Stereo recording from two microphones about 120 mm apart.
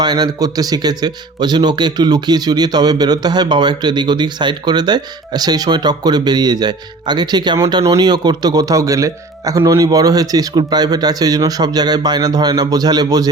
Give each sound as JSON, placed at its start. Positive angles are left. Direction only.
{"t": 0.0, "sound": "a man's voice", "side_deg": -35}